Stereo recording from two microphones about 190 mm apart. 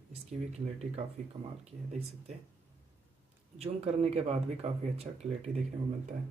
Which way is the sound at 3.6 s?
35° right (ahead or behind).